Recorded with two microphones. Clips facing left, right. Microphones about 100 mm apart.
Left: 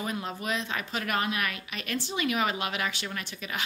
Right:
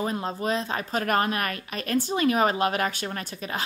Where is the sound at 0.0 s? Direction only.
35° right (ahead or behind).